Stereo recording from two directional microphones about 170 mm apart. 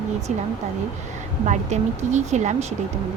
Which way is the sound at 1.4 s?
45° right (ahead or behind).